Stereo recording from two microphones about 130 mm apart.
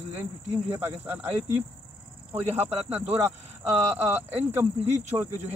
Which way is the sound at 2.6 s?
55° right (ahead or behind).